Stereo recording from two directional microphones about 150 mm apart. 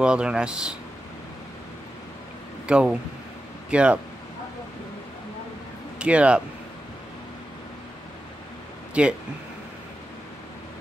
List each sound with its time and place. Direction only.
0.0 s speech: 5° right (ahead or behind)
2.6 s speech: 5° right (ahead or behind)
5.9 s speech: 10° right (ahead or behind)
9.0 s speech: 5° right (ahead or behind)